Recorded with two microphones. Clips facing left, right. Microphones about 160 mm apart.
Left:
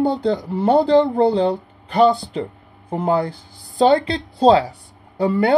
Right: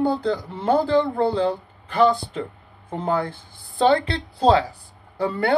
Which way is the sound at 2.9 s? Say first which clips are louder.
Left 4 dB; 20° left (ahead or behind).